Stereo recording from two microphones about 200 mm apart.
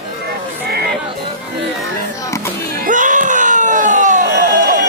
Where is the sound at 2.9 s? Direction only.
40° right (ahead or behind).